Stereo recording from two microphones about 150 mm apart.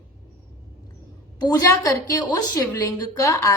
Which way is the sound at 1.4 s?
25° left (ahead or behind).